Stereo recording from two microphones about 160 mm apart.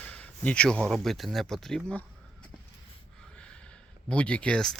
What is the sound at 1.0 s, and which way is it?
Speech, centre (ahead or behind).